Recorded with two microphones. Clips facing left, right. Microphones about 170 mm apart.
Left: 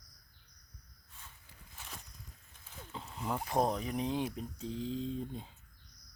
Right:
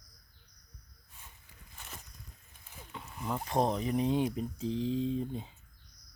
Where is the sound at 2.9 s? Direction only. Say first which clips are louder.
Even; 25° left (ahead or behind).